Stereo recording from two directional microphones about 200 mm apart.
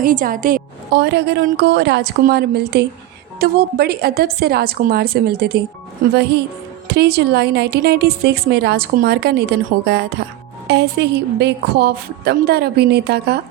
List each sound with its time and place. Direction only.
0.0 s a woman's voice: 45° right (ahead or behind)